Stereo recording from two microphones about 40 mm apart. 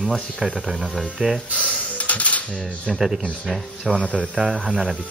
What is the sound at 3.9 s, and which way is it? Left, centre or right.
A man's voice, centre.